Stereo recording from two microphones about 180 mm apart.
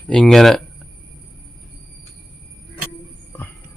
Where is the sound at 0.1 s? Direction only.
5° left (ahead or behind).